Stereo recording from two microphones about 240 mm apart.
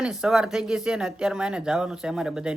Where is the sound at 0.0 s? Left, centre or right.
Centre.